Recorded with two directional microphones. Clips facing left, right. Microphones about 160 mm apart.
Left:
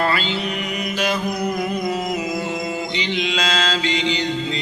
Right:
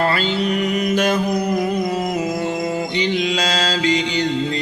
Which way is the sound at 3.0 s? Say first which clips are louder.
Right 4 dB; 45° right (ahead or behind).